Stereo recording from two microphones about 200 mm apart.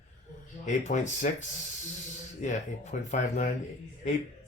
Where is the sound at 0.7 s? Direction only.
35° left (ahead or behind).